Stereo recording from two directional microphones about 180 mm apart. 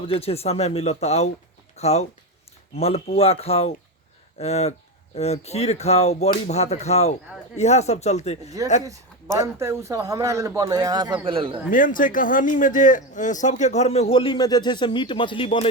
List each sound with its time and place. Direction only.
0.1 s a man's voice: 35° left (ahead or behind)
8.8 s a sound: 20° right (ahead or behind)
9.6 s a man's voice: 15° right (ahead or behind)
11.7 s a man's voice: 45° left (ahead or behind); by 15.7 s 30° left (ahead or behind)